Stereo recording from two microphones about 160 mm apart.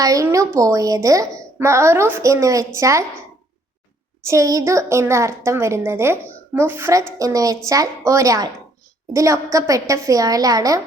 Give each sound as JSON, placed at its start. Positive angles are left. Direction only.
{"t": 0.0, "sound": "a woman's voice", "side_deg": -20}
{"t": 4.3, "sound": "a woman's voice", "side_deg": -20}